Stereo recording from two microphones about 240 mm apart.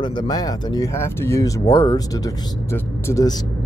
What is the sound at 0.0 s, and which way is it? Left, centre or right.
Speech, centre.